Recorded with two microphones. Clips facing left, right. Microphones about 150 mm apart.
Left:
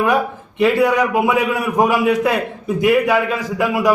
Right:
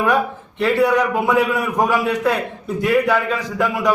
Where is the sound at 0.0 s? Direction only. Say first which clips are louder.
Left 1 dB; 15° left (ahead or behind).